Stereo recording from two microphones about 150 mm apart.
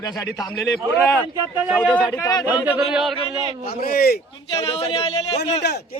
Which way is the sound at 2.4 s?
15° right (ahead or behind).